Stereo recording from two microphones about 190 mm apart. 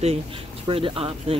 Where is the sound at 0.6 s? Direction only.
30° right (ahead or behind).